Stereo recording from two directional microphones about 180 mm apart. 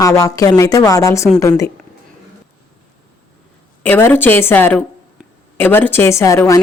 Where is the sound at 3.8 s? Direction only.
10° left (ahead or behind).